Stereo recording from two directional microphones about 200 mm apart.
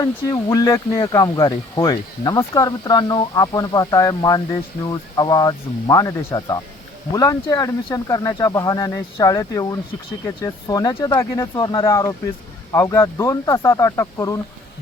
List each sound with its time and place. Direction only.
0.0 s speech: 20° left (ahead or behind)